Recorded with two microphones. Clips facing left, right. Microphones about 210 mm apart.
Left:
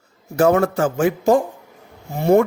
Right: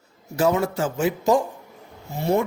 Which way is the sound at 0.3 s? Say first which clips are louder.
Left 5 dB; 50° left (ahead or behind).